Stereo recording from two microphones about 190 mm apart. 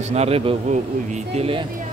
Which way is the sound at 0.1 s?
35° right (ahead or behind).